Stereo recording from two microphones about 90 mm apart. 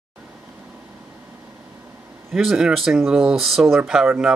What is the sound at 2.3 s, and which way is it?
Speech, 5° right (ahead or behind).